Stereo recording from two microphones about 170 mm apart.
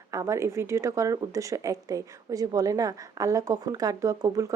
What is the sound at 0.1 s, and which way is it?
Speech, 20° right (ahead or behind).